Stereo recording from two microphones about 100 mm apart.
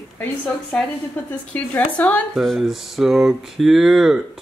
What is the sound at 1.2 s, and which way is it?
Speech, 20° left (ahead or behind).